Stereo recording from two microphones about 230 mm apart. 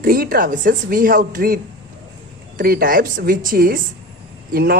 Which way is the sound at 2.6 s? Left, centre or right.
Right.